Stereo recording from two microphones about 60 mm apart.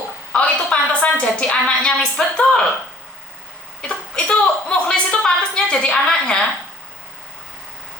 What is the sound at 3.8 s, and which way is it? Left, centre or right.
A woman's voice, centre.